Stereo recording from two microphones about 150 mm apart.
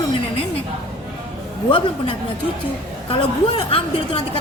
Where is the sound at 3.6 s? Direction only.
35° left (ahead or behind).